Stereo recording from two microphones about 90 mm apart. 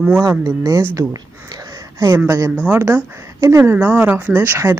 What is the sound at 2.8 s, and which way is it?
Speech, 30° right (ahead or behind).